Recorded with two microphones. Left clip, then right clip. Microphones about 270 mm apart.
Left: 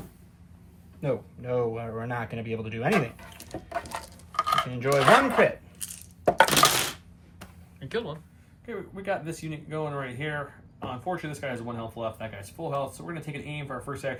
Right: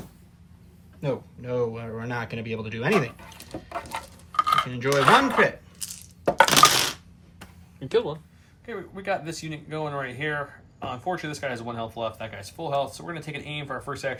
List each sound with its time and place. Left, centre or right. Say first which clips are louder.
1.0 s speech: even; centre
3.5 s cutlery: right 1 dB; centre
7.8 s a sound: right 8 dB; centre
8.6 s speech: right 2 dB; centre